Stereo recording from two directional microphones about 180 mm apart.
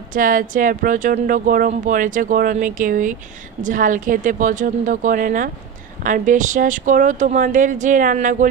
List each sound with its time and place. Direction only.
0.1 s speech: 50° right (ahead or behind)